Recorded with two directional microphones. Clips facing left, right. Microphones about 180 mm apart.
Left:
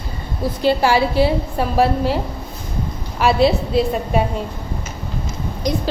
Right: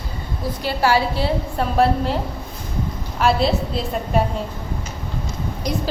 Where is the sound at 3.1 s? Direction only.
Centre (ahead or behind).